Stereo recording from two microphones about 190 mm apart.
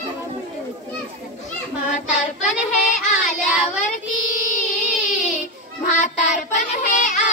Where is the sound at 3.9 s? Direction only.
45° left (ahead or behind).